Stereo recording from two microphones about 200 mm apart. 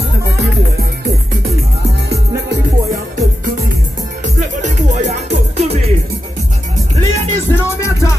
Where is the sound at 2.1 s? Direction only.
50° right (ahead or behind).